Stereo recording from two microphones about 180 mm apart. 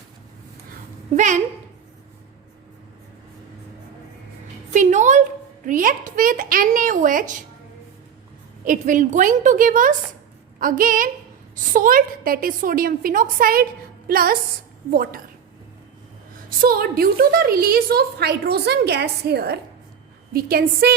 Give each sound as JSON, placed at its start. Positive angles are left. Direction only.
{"t": 1.1, "sound": "a woman's voice", "side_deg": -40}
{"t": 4.7, "sound": "a sound", "side_deg": -40}
{"t": 5.6, "sound": "a woman's voice", "side_deg": -45}
{"t": 8.6, "sound": "a woman's voice", "side_deg": -45}
{"t": 16.6, "sound": "a woman's voice", "side_deg": -55}